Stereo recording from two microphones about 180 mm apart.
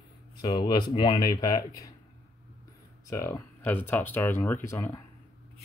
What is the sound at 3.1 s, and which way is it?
Speech, 15° left (ahead or behind).